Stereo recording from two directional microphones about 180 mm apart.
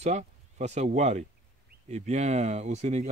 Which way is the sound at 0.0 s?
40° right (ahead or behind).